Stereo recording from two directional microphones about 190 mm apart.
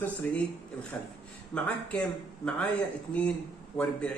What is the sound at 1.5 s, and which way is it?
A man's voice, 5° left (ahead or behind).